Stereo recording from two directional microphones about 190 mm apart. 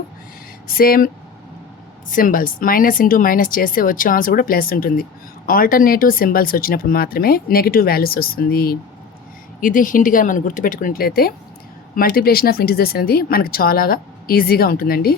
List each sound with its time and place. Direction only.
0.7 s speech: 50° left (ahead or behind)